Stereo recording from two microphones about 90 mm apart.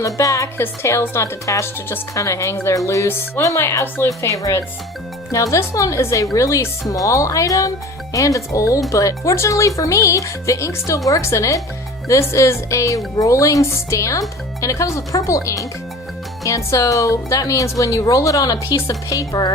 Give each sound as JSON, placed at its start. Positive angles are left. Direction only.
{"t": 0.0, "sound": "speech", "side_deg": 35}